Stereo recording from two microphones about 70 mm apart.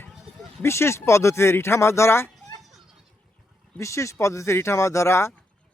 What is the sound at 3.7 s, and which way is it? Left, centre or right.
Speech, left.